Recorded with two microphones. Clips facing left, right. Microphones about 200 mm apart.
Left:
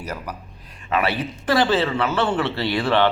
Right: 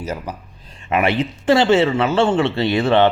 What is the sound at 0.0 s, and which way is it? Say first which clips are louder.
Speech: right 4 dB; 25° right (ahead or behind).